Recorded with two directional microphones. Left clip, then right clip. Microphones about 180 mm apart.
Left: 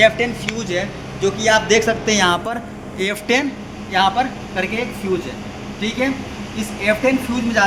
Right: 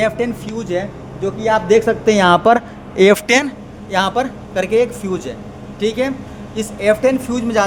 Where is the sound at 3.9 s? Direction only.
60° right (ahead or behind).